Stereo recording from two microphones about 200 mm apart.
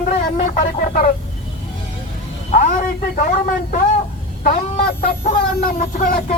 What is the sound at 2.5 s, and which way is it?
A man's voice, 35° left (ahead or behind).